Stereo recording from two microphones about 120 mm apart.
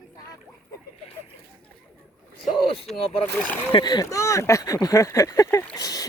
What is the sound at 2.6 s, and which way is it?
Speech, 50° left (ahead or behind).